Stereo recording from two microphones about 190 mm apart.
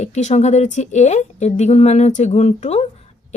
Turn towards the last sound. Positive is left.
turn(degrees=35)  # may be behind; listen again after turning